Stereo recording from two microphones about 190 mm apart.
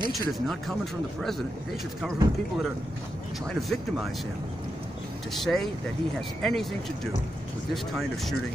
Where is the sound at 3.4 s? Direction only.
Centre (ahead or behind).